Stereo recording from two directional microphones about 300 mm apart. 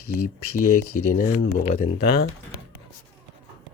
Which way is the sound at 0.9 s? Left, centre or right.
Left.